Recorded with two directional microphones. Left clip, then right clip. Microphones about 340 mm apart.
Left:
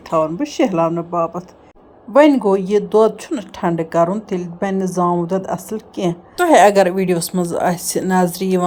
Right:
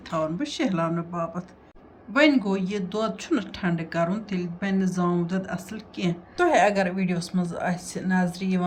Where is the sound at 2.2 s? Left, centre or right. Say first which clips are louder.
Left 9 dB; centre.